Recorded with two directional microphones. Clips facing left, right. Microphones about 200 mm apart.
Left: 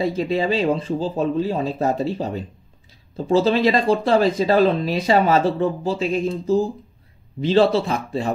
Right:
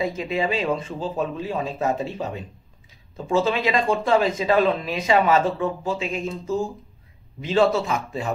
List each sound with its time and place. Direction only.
0.0 s speech: 35° left (ahead or behind)